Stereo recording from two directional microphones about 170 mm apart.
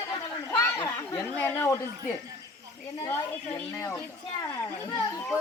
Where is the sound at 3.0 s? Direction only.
20° left (ahead or behind).